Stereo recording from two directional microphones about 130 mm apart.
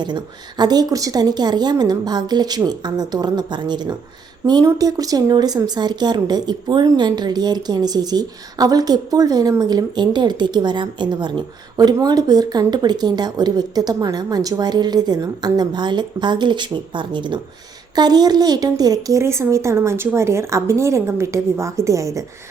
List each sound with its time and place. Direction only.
0.0 s a woman's voice: 35° right (ahead or behind)